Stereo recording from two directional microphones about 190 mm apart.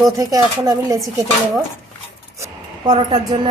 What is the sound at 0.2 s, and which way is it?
Speech, 20° right (ahead or behind).